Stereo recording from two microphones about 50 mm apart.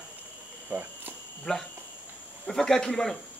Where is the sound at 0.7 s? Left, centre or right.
Right.